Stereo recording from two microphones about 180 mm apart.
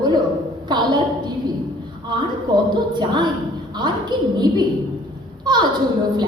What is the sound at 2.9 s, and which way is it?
A woman's voice, 25° right (ahead or behind).